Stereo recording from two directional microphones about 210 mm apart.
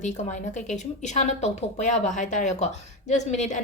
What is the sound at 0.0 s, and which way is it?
Speech, 35° left (ahead or behind).